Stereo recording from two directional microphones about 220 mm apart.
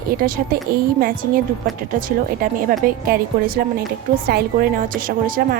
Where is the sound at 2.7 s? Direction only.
40° right (ahead or behind).